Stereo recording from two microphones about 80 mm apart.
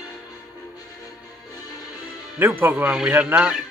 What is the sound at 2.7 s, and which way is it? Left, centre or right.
Speech, centre.